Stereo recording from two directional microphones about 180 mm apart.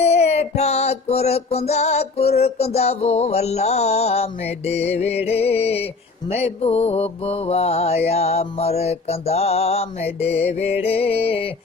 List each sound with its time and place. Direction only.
0.0 s music: 35° left (ahead or behind)